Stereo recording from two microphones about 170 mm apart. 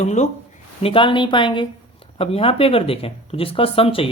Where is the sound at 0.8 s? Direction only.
30° left (ahead or behind).